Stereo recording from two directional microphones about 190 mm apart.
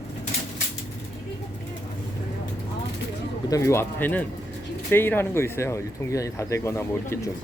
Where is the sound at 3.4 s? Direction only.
15° left (ahead or behind).